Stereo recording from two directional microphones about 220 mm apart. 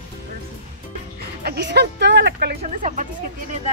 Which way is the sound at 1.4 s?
45° right (ahead or behind).